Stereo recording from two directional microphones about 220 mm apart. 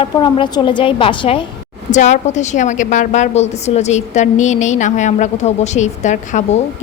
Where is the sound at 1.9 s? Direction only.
30° left (ahead or behind).